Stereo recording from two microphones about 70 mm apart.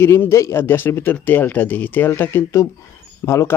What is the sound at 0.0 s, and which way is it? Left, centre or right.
A man's voice, left.